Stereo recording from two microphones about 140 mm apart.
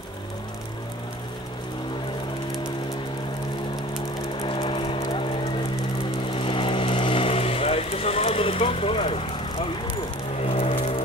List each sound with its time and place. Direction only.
4.4 s vehicle: 40° left (ahead or behind)
6.3 s vehicle: 40° left (ahead or behind)
10.4 s a sound: 45° left (ahead or behind)